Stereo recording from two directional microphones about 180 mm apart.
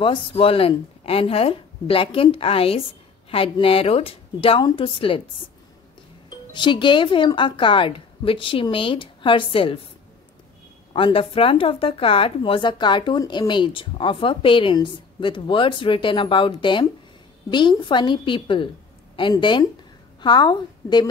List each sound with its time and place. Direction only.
0.0 s a woman's voice: 30° left (ahead or behind)
6.5 s a woman's voice: 25° left (ahead or behind)
10.9 s a woman's voice: 30° left (ahead or behind)